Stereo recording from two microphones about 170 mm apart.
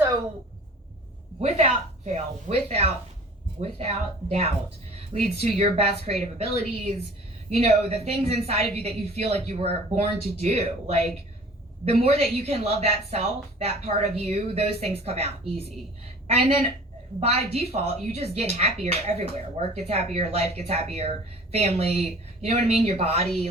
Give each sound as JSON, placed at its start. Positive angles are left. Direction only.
{"t": 1.4, "sound": "a woman's voice", "side_deg": -40}
{"t": 7.5, "sound": "a woman's voice", "side_deg": -35}